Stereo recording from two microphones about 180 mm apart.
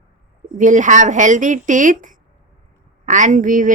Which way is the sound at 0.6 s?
45° right (ahead or behind).